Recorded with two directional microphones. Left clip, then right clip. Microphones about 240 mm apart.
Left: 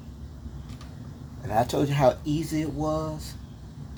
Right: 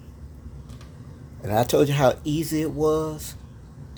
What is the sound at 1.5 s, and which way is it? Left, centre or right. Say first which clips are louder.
Speech: right 5 dB; right.